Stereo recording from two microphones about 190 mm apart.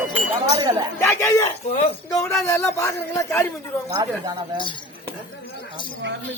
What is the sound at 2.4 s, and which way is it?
Speech, 15° left (ahead or behind).